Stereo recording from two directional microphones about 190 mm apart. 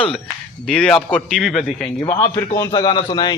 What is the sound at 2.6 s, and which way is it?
Speech, 25° left (ahead or behind).